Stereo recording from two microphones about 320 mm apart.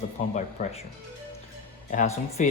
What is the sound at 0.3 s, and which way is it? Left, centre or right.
Speech, left.